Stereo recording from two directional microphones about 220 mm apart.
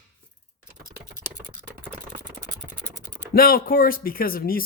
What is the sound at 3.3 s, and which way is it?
Speech, 40° left (ahead or behind).